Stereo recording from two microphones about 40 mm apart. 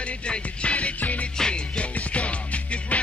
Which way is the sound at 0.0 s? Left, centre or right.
Left.